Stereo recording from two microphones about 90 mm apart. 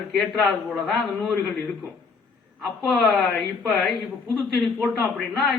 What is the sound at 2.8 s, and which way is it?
Speech, centre (ahead or behind).